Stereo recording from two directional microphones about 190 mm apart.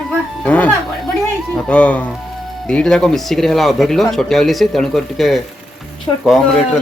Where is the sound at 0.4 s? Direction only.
5° left (ahead or behind).